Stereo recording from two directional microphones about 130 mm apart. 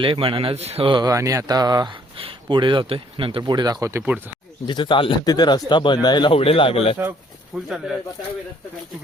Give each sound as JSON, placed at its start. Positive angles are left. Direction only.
{"t": 0.0, "sound": "speech", "side_deg": -40}
{"t": 4.6, "sound": "speech", "side_deg": 35}
{"t": 7.5, "sound": "speech", "side_deg": 0}